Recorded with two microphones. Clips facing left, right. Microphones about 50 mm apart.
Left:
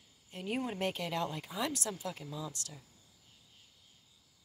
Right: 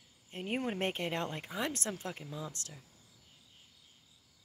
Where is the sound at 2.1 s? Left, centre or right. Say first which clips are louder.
Even; right.